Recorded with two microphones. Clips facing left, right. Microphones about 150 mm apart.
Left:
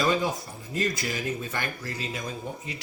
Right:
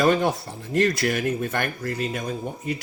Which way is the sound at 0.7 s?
70° right (ahead or behind).